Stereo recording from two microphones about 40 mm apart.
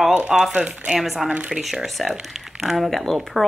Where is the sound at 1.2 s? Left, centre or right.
Right.